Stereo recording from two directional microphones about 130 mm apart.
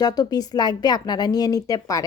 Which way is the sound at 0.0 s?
30° left (ahead or behind).